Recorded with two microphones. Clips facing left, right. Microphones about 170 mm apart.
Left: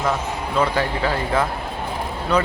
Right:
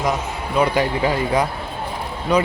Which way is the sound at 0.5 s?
15° right (ahead or behind).